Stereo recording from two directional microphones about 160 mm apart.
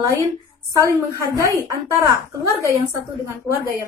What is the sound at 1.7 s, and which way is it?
Speech, 20° right (ahead or behind).